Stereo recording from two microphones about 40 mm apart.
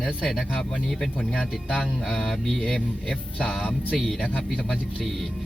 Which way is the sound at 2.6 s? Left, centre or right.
Centre.